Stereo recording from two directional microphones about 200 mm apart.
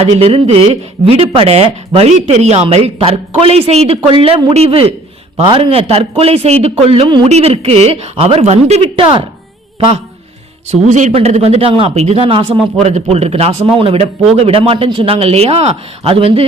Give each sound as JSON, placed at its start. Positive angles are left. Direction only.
{"t": 0.0, "sound": "a man's voice", "side_deg": -30}
{"t": 10.7, "sound": "a man's voice", "side_deg": -35}